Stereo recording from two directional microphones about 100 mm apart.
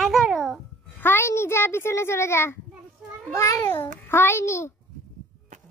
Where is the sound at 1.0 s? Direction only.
25° left (ahead or behind).